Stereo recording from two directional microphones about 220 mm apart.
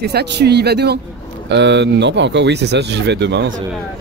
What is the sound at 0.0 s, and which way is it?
Speech, 50° right (ahead or behind).